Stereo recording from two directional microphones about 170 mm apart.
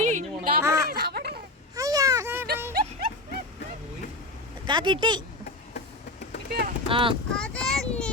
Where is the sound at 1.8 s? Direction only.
20° right (ahead or behind).